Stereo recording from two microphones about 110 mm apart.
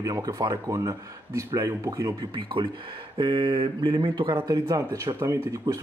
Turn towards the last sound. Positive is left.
turn(degrees=-30)  # may be behind; listen again after turning